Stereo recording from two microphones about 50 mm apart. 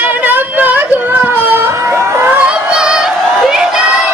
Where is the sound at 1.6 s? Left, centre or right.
Right.